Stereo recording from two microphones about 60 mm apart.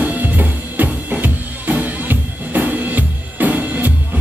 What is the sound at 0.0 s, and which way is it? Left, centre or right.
Drum kit, right.